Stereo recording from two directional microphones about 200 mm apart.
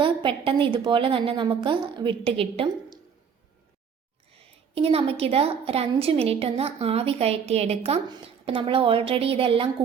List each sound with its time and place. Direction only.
0.0 s a woman's voice: 25° right (ahead or behind)
4.7 s a woman's voice: 30° right (ahead or behind)